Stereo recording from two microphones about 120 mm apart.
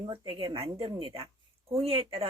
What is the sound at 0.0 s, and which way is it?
A woman's voice, 40° right (ahead or behind).